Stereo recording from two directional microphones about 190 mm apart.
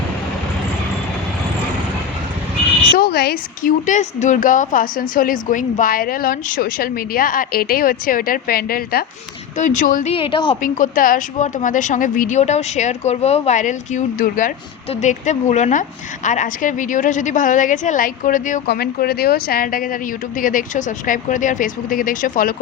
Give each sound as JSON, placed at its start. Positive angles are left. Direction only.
{"t": 3.0, "sound": "a woman's voice", "side_deg": 55}
{"t": 10.1, "sound": "a woman's voice", "side_deg": 30}
{"t": 10.6, "sound": "a woman's voice", "side_deg": 45}